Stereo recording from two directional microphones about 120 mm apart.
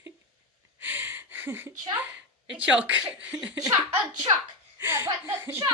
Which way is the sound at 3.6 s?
30° right (ahead or behind).